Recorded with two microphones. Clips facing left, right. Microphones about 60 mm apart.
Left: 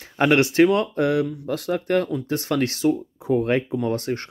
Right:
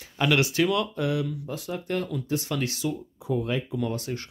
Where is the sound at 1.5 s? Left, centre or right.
Left.